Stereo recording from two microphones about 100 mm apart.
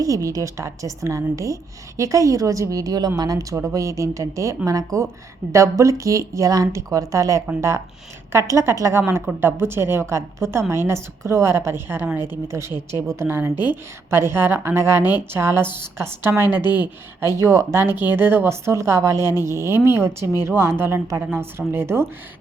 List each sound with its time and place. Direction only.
0.0 s speech: 35° right (ahead or behind)